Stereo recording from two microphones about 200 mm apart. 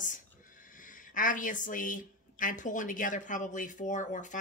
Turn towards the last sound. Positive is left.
turn(degrees=40)  # may be behind; listen again after turning